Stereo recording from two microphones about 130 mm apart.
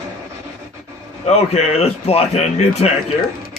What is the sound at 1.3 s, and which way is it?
A man's voice, 55° left (ahead or behind).